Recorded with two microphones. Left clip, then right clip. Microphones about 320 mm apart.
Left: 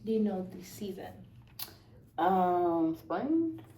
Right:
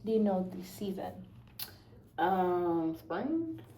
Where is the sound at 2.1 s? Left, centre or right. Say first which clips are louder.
Left 2 dB; centre.